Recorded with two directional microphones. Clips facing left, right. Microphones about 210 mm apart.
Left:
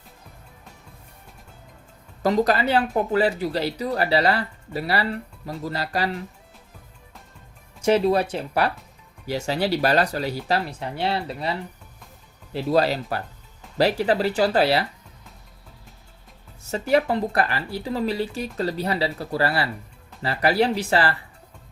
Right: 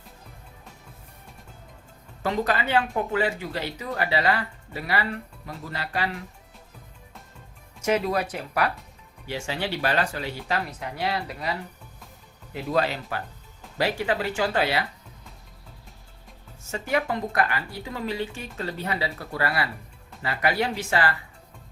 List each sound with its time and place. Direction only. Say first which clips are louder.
2.2 s speech: left 6 dB; 35° left (ahead or behind)
7.8 s speech: left 5 dB; 30° left (ahead or behind)
12.5 s speech: left 5 dB; 35° left (ahead or behind)
16.7 s speech: left 6 dB; 35° left (ahead or behind)